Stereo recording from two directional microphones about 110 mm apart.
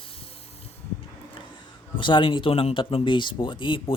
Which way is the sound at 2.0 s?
50° left (ahead or behind).